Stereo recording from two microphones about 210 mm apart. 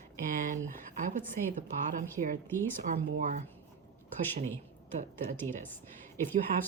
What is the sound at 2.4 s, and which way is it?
Speech, 10° left (ahead or behind).